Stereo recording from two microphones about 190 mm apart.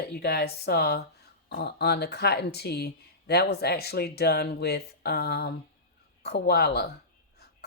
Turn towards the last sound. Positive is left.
turn(degrees=55)  # may be behind; listen again after turning